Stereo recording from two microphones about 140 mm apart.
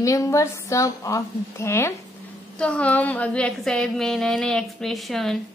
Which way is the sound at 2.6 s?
10° left (ahead or behind).